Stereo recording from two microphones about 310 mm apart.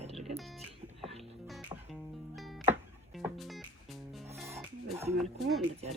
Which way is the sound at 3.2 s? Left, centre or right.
Centre.